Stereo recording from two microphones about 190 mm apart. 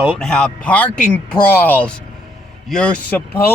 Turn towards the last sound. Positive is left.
turn(degrees=10)  # may be behind; listen again after turning